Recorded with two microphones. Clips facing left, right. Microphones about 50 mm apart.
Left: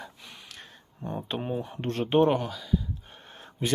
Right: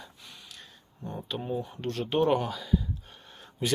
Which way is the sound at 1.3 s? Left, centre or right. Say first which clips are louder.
Even; left.